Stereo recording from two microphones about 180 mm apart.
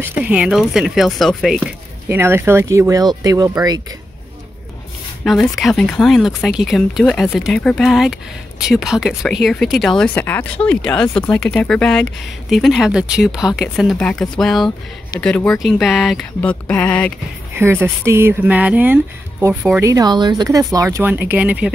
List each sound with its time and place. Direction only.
0.0 s speech: 5° right (ahead or behind)
2.0 s speech: 15° right (ahead or behind)
5.2 s speech: centre (ahead or behind)
16.3 s music: 10° left (ahead or behind)
17.6 s speech: 15° right (ahead or behind)